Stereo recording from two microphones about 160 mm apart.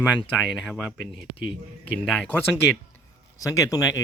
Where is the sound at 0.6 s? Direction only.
Centre (ahead or behind).